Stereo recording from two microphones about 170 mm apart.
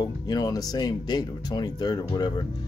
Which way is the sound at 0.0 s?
20° left (ahead or behind).